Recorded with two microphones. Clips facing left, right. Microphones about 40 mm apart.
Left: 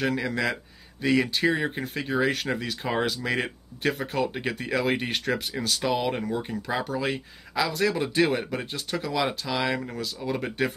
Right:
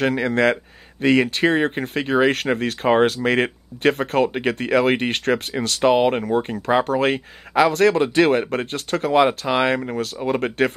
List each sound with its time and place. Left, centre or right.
0.0 s speech: right